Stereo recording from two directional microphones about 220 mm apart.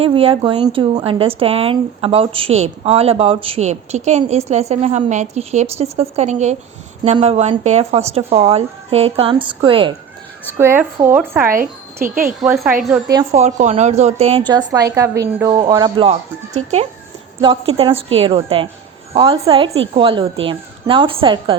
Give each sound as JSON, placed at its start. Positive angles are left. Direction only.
{"t": 0.0, "sound": "a woman's voice", "side_deg": -25}
{"t": 10.6, "sound": "a woman's voice", "side_deg": -10}
{"t": 12.0, "sound": "speech", "side_deg": -40}
{"t": 12.4, "sound": "a woman's voice", "side_deg": -5}
{"t": 13.3, "sound": "a woman's voice", "side_deg": -30}
{"t": 17.4, "sound": "a woman's voice", "side_deg": -25}